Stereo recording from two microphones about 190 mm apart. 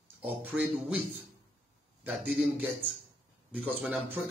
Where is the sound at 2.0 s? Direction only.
10° right (ahead or behind).